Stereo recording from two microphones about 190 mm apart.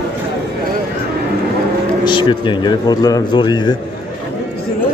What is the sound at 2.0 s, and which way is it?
A man's voice, 25° left (ahead or behind).